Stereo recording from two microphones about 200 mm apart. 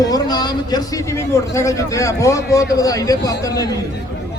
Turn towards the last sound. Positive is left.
turn(degrees=20)  # may be behind; listen again after turning